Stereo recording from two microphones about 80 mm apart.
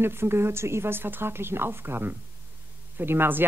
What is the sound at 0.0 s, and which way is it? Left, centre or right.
A woman's voice, right.